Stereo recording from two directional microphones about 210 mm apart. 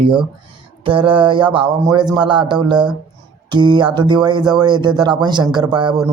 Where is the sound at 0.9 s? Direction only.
25° right (ahead or behind).